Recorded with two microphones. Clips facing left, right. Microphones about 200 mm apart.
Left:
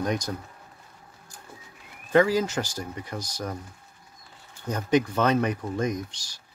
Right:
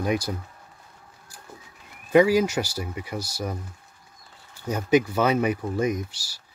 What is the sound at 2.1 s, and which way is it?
Speech, 10° right (ahead or behind).